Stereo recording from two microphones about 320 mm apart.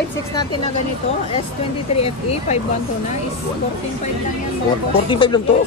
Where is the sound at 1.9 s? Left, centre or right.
Centre.